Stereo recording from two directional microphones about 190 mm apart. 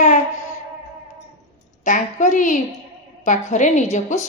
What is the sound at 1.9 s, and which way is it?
A child's voice, 40° left (ahead or behind).